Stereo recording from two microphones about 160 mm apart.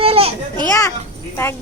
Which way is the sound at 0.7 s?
20° left (ahead or behind).